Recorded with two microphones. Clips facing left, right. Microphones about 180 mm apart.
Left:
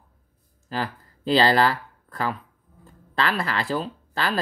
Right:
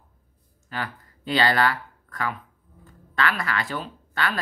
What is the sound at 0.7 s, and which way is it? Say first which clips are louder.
Speech: left 4 dB; 30° left (ahead or behind).